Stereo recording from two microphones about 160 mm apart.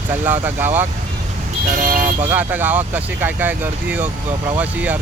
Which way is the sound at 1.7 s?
60° right (ahead or behind).